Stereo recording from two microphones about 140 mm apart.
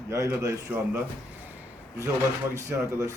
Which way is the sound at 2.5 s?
20° right (ahead or behind).